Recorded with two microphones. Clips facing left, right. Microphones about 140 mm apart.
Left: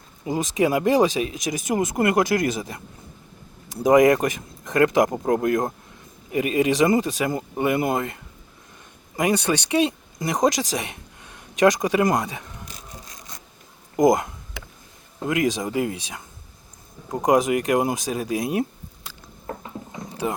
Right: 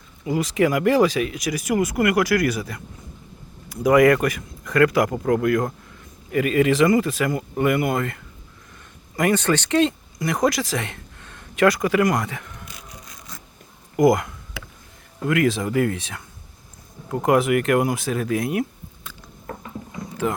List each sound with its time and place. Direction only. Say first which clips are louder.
0.3 s speech: right 1 dB; 20° left (ahead or behind)
13.9 s speech: right 1 dB; 20° left (ahead or behind)
19.0 s vehicle: left 1 dB; 25° left (ahead or behind)